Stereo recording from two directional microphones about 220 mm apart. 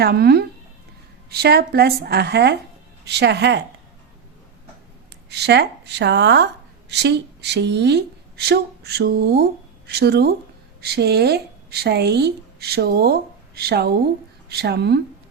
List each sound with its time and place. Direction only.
0.0 s speech: 45° right (ahead or behind)
5.3 s a woman's voice: 50° right (ahead or behind)